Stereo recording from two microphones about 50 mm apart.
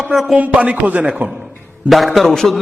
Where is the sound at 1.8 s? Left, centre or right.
Centre.